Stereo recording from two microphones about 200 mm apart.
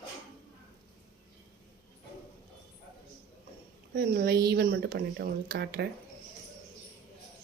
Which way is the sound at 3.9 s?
55° right (ahead or behind).